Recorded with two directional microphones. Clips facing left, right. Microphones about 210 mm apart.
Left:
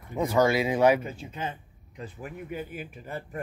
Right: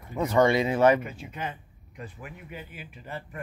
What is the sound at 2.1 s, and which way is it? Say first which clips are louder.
Speech: left 6 dB; 45° left (ahead or behind).